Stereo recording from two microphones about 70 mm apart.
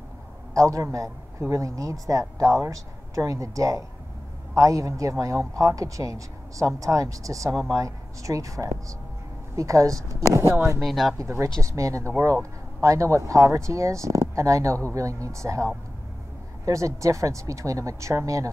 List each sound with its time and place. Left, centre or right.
0.6 s speech: right
10.8 s speech: centre
11.1 s speech: right